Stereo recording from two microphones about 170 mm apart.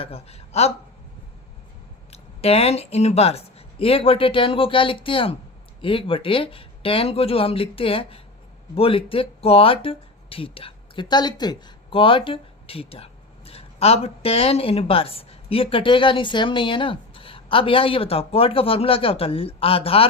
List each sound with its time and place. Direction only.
0.0 s speech: 35° left (ahead or behind)
2.4 s speech: 35° left (ahead or behind)